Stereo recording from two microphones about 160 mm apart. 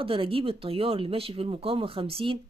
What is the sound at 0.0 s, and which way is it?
Speech, 35° right (ahead or behind).